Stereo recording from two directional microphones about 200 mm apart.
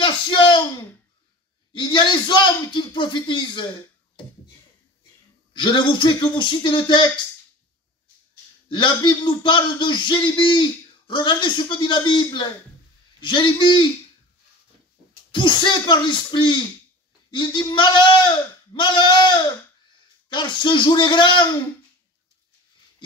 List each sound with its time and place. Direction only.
0.0 s a sound: 25° left (ahead or behind)
1.7 s speech: 25° left (ahead or behind)
5.5 s speech: 25° left (ahead or behind)
8.6 s speech: 25° left (ahead or behind)
15.3 s speech: 25° left (ahead or behind)